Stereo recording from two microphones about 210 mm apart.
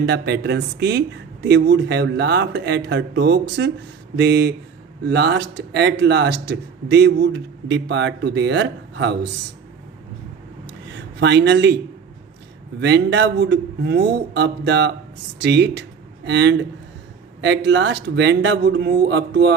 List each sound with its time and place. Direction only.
0.0 s speech: 55° right (ahead or behind)
10.9 s speech: 55° right (ahead or behind)
12.8 s speech: 55° right (ahead or behind)